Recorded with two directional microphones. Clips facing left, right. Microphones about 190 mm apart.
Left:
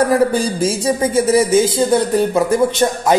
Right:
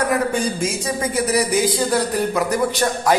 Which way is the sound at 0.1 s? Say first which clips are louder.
Left 5 dB; 30° left (ahead or behind).